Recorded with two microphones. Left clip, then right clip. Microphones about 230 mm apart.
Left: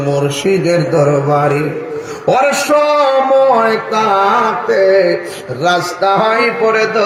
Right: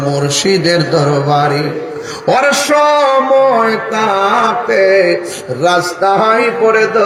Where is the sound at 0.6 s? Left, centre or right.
Centre.